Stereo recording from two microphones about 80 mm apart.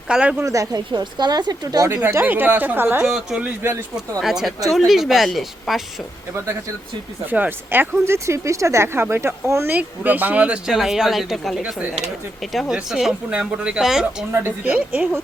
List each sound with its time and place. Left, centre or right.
0.1 s speech: centre
0.4 s a woman's voice: right
1.9 s speech: right
3.0 s speech: centre
7.3 s speech: right
9.7 s speech: right
10.7 s speech: centre
14.6 s speech: centre